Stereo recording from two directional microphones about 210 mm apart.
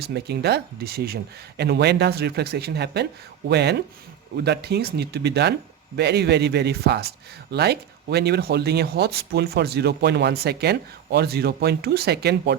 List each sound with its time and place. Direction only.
0.0 s speech: 50° right (ahead or behind)